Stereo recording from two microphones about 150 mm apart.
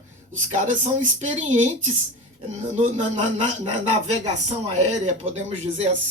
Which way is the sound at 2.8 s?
55° right (ahead or behind).